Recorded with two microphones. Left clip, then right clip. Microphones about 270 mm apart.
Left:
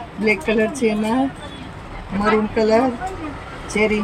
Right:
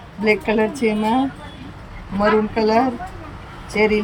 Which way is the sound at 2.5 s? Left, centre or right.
Centre.